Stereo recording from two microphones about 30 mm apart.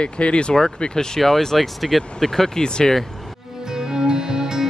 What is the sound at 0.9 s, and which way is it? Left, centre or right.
Speech, centre.